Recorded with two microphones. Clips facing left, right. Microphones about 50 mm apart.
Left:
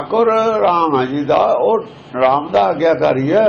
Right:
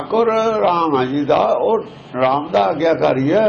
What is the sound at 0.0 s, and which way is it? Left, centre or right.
A man's voice, centre.